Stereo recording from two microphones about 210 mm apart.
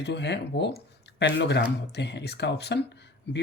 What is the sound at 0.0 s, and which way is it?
Speech, 55° left (ahead or behind).